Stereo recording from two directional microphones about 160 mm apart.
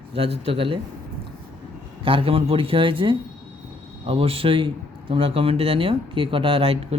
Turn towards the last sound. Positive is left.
turn(degrees=-35)  # may be behind; listen again after turning